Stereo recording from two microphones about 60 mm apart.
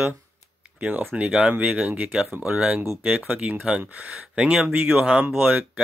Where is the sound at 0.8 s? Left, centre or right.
Right.